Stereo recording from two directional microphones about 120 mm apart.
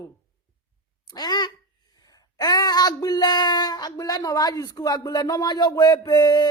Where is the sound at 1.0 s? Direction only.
35° left (ahead or behind).